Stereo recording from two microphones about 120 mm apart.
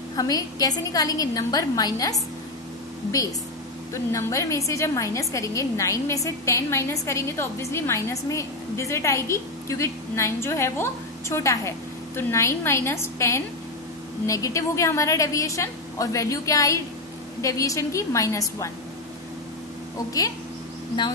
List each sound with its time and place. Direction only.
0.1 s a woman's voice: 30° left (ahead or behind)
3.9 s a woman's voice: 25° left (ahead or behind)